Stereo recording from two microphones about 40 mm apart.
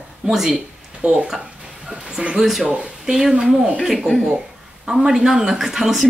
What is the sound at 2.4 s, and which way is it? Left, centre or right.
A woman's voice, centre.